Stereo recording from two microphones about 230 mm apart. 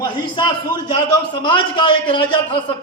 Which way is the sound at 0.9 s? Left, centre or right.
Centre.